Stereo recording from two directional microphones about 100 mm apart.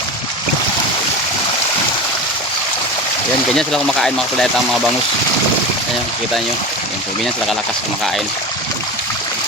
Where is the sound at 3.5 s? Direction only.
5° left (ahead or behind).